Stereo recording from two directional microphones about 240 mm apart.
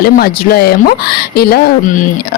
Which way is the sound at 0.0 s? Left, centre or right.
Left.